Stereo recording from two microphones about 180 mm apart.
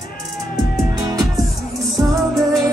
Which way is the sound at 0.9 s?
20° right (ahead or behind).